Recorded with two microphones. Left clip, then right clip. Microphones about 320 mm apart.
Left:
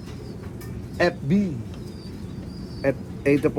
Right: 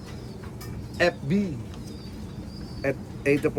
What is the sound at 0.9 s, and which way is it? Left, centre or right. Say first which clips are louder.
Speech: left 1 dB; centre.